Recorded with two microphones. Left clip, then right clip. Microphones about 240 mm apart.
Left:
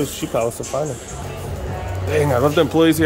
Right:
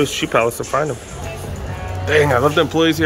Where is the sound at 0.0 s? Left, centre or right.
Centre.